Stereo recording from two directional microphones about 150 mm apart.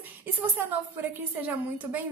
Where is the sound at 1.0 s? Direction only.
10° right (ahead or behind).